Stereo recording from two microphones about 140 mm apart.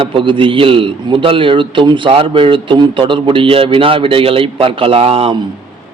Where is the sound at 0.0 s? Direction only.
40° right (ahead or behind).